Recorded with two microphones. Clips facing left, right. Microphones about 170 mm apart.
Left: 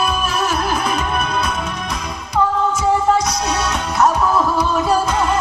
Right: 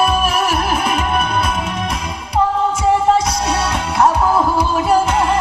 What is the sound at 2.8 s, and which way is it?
Music, 25° right (ahead or behind).